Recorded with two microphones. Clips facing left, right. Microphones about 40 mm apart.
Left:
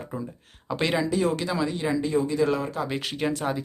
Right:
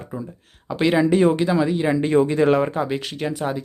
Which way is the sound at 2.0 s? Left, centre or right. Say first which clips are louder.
Right 6 dB; right.